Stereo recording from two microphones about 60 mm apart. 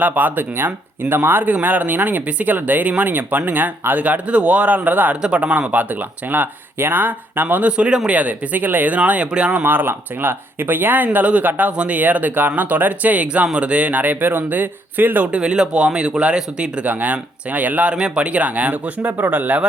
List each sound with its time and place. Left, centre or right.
0.0 s speech: right
9.6 s speech: right
15.3 s speech: centre